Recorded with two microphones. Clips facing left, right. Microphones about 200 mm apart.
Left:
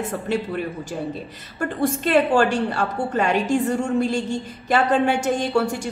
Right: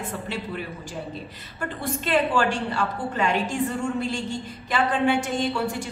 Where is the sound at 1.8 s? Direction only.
45° left (ahead or behind).